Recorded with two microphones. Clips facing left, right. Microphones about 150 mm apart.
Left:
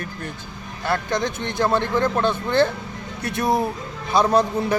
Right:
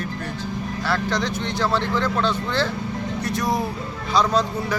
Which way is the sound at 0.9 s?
50° left (ahead or behind).